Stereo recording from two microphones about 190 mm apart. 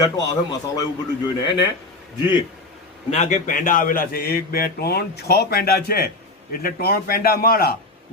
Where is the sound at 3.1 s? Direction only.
40° left (ahead or behind).